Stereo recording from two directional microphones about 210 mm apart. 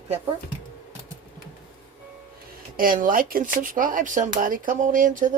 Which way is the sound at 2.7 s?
40° right (ahead or behind).